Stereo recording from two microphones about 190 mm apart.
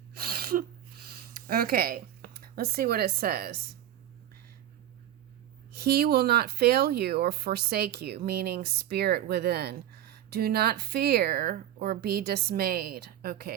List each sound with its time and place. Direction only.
0.1 s sneeze: 55° right (ahead or behind)
1.0 s speech: 55° right (ahead or behind)
5.7 s speech: 55° right (ahead or behind)